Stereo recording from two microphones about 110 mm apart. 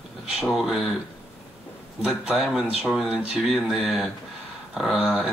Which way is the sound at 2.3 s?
5° right (ahead or behind).